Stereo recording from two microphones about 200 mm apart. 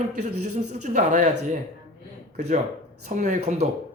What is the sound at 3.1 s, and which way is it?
Speech, 35° right (ahead or behind).